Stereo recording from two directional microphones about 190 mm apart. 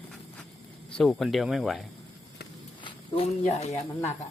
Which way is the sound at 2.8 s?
25° left (ahead or behind).